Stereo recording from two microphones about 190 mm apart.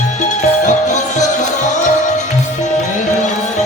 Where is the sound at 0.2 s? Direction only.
40° left (ahead or behind).